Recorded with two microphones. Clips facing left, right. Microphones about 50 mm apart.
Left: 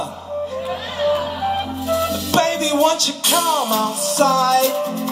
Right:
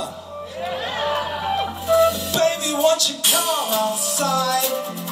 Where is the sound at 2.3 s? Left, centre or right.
Left.